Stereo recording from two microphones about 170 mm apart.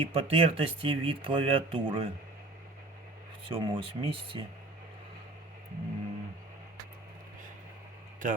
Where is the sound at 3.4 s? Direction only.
30° right (ahead or behind).